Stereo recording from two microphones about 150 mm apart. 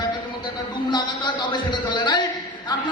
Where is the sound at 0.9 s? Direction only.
30° left (ahead or behind).